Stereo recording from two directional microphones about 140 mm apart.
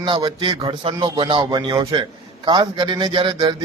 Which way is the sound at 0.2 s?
30° right (ahead or behind).